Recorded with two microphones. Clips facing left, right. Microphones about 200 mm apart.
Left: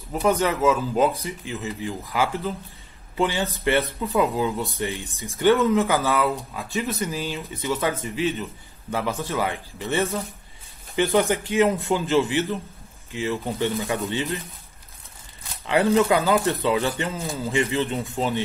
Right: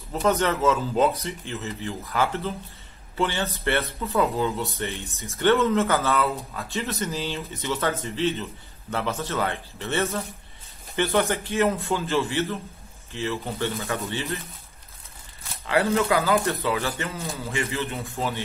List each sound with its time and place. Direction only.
0.1 s speech: 10° left (ahead or behind)
15.6 s speech: 15° left (ahead or behind)